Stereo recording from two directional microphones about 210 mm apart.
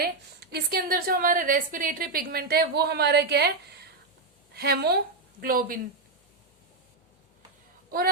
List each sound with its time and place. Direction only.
0.0 s a woman's voice: 50° right (ahead or behind)
4.5 s a woman's voice: 50° right (ahead or behind)
7.9 s speech: 45° right (ahead or behind)